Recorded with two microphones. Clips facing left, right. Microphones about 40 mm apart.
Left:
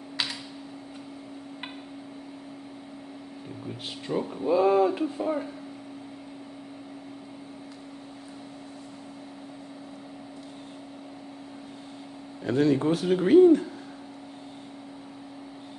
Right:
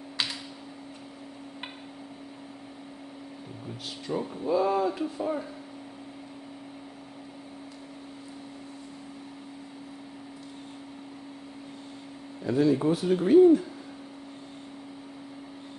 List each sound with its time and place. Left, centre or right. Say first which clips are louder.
4.1 s speech: left 2 dB; centre
5.2 s speech: even; centre
12.4 s speech: left 1 dB; left